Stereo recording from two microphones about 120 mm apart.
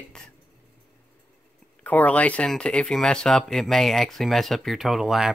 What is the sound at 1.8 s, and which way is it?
Speech, 10° left (ahead or behind).